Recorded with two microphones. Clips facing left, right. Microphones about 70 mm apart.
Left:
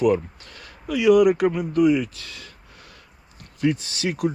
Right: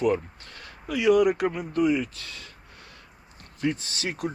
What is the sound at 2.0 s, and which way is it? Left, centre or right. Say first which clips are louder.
Speech: left 3 dB; right.